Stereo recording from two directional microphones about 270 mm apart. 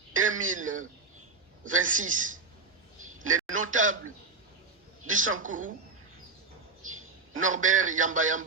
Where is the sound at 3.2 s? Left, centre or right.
Right.